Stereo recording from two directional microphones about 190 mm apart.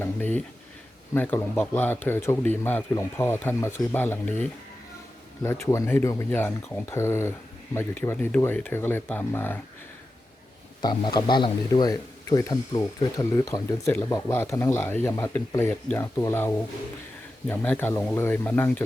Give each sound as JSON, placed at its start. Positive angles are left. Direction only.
{"t": 0.0, "sound": "a man's voice", "side_deg": 10}
{"t": 10.8, "sound": "a man's voice", "side_deg": 25}